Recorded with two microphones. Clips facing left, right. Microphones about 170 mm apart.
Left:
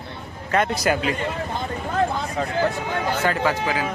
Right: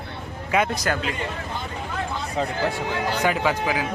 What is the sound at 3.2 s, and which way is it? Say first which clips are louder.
Speech: right 1 dB; 15° right (ahead or behind).